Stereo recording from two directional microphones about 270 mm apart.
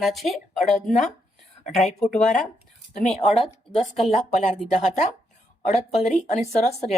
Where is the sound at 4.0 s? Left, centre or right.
Left.